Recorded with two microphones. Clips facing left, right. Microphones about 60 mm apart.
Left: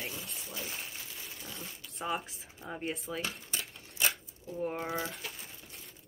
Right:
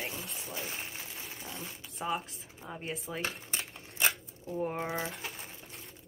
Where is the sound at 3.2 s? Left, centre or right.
Right.